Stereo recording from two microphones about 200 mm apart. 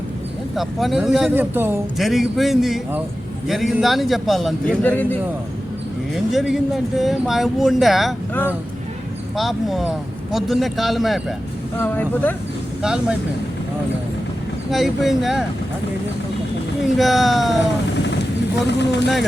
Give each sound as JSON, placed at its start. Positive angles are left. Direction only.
{"t": 0.5, "sound": "a man's voice", "side_deg": 0}
{"t": 12.8, "sound": "a man's voice", "side_deg": -5}
{"t": 14.7, "sound": "a man's voice", "side_deg": 0}
{"t": 16.8, "sound": "a man's voice", "side_deg": 0}
{"t": 18.0, "sound": "vehicle", "side_deg": 60}